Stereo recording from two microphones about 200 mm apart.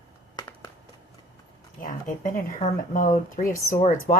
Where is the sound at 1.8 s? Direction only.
40° left (ahead or behind).